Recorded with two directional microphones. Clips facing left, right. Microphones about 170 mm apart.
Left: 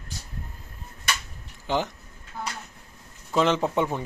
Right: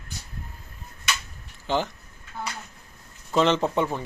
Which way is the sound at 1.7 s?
15° left (ahead or behind).